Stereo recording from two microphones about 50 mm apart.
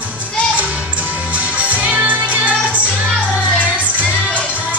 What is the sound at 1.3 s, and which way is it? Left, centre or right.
Music, right.